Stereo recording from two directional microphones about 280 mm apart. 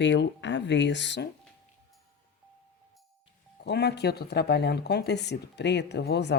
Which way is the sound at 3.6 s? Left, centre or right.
Left.